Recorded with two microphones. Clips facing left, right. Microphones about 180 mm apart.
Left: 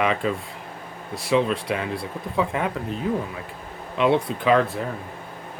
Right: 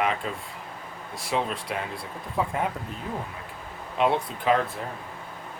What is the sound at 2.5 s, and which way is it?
Speech, 90° left.